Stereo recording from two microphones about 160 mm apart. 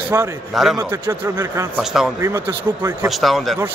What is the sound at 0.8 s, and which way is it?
Speech, 15° right (ahead or behind).